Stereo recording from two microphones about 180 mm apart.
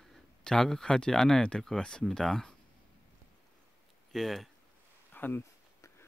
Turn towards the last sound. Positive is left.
turn(degrees=15)  # may be behind; listen again after turning